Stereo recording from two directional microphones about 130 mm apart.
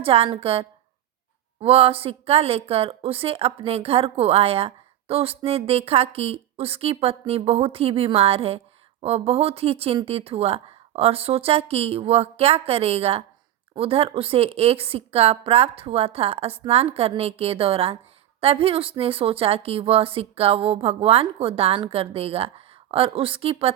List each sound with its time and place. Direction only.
0.0 s a woman's voice: 45° right (ahead or behind)